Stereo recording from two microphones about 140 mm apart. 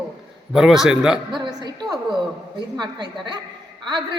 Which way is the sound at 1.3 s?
30° right (ahead or behind).